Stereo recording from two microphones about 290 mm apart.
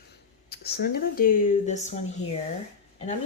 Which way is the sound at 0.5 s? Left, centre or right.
Left.